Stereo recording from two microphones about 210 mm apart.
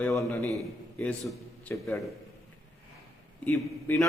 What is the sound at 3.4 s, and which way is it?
Speech, 10° left (ahead or behind).